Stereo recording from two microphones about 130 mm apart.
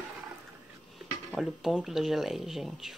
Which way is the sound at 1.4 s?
Centre (ahead or behind).